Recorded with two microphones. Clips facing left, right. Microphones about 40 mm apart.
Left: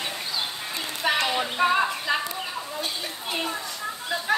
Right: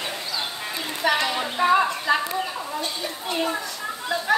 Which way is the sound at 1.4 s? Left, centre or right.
Centre.